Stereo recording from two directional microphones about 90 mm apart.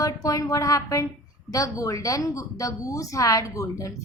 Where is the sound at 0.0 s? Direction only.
40° left (ahead or behind).